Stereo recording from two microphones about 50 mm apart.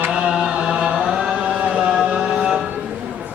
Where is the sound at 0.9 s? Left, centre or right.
Centre.